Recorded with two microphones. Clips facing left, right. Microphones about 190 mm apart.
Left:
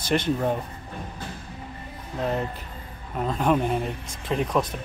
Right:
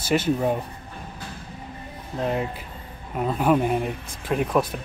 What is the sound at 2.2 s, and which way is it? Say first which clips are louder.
Speech: right 1 dB; 5° right (ahead or behind).